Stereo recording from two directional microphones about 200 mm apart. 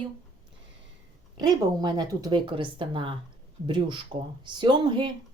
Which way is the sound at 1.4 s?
20° right (ahead or behind).